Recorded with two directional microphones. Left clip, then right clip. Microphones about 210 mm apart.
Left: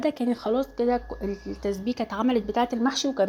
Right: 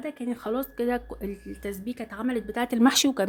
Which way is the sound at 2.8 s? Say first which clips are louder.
Right 4 dB; 35° right (ahead or behind).